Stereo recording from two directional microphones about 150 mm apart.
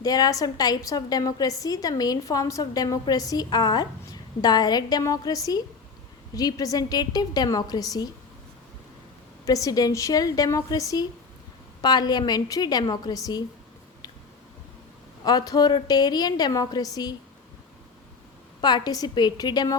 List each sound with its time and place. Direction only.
0.0 s a woman's voice: 25° left (ahead or behind)
9.5 s a woman's voice: 25° left (ahead or behind)
15.2 s a woman's voice: 25° left (ahead or behind)
18.6 s a woman's voice: 25° left (ahead or behind)